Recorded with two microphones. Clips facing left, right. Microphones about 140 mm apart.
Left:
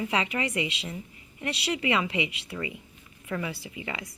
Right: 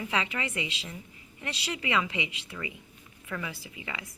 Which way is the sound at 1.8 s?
30° left (ahead or behind).